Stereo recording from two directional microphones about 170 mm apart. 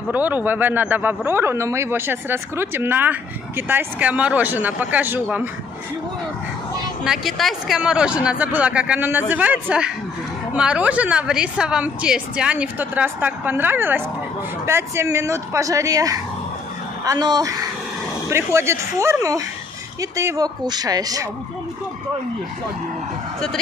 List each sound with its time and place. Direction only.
0.1 s speech: 10° right (ahead or behind)
7.1 s speech: centre (ahead or behind); by 21.3 s 20° right (ahead or behind)